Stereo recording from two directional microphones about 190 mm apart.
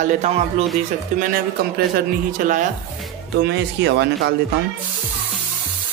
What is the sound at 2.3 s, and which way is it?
Speech, 45° right (ahead or behind).